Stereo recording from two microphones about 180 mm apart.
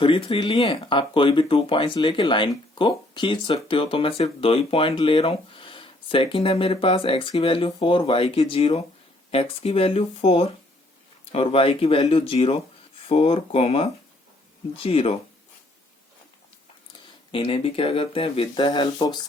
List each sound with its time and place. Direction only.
0.0 s speech: 30° left (ahead or behind)
17.3 s speech: 30° left (ahead or behind)